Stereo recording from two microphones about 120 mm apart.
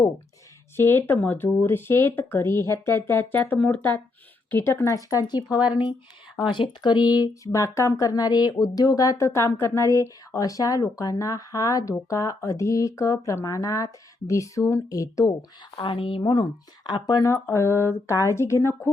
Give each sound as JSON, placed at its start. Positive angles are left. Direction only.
{"t": 0.8, "sound": "speech", "side_deg": 20}
{"t": 6.5, "sound": "speech", "side_deg": 40}
{"t": 15.7, "sound": "speech", "side_deg": 45}